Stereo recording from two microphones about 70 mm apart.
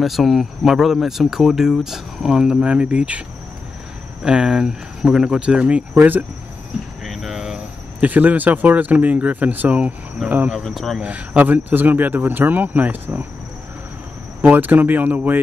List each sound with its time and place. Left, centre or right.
0.0 s speech: centre
7.1 s a sound: centre
8.0 s speech: right
10.6 s speech: centre
11.0 s speech: right
14.4 s speech: right